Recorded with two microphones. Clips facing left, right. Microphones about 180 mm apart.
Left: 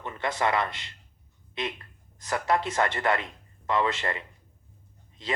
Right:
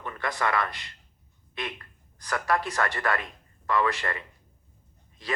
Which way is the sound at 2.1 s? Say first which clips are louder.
Left 1 dB; 20° left (ahead or behind).